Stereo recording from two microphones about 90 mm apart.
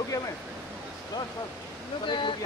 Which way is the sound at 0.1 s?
40° left (ahead or behind).